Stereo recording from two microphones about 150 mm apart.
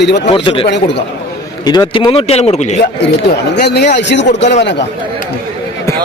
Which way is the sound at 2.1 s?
40° left (ahead or behind).